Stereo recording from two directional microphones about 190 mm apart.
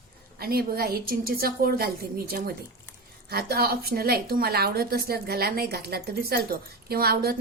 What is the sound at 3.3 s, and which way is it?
A woman's voice, 55° right (ahead or behind).